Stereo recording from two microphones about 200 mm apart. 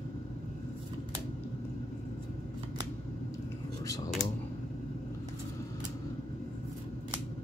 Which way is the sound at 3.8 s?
15° left (ahead or behind).